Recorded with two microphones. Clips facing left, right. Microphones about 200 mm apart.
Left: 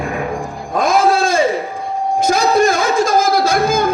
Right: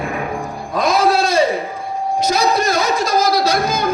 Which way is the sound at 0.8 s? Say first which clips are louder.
Left 1 dB; 50° left (ahead or behind).